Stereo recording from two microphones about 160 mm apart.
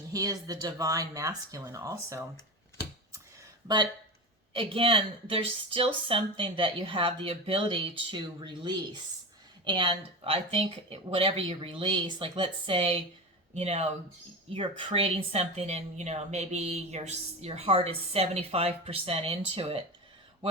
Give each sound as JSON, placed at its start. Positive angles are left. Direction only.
{"t": 0.1, "sound": "speech", "side_deg": -20}
{"t": 4.5, "sound": "a woman's voice", "side_deg": -35}